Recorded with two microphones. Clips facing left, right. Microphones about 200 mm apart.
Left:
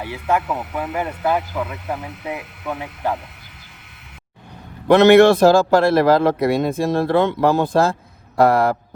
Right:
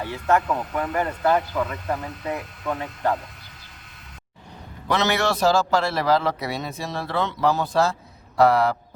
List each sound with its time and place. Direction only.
0.0 s speech: 10° left (ahead or behind)
4.9 s a man's voice: 55° left (ahead or behind)